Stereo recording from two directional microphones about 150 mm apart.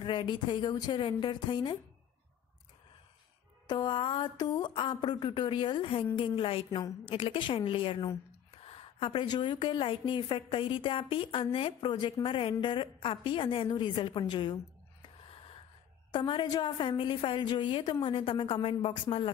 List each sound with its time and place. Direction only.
0.0 s a woman's voice: 35° left (ahead or behind)
3.6 s a woman's voice: 30° left (ahead or behind)
16.1 s a woman's voice: 30° left (ahead or behind)